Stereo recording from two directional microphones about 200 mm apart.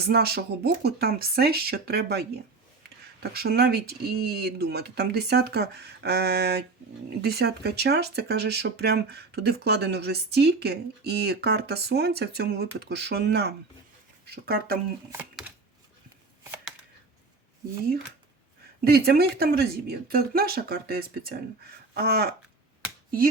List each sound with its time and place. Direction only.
0.0 s speech: 50° right (ahead or behind)
18.9 s speech: 50° right (ahead or behind)